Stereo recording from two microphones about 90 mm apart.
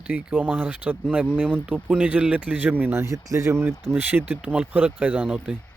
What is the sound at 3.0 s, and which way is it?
Speech, 35° right (ahead or behind).